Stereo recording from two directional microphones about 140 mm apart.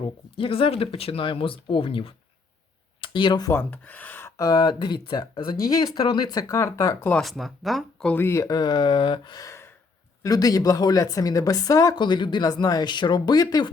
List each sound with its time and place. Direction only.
0.3 s speech: 40° left (ahead or behind)
3.5 s speech: 15° left (ahead or behind)
7.1 s speech: centre (ahead or behind)
8.1 s speech: 20° left (ahead or behind)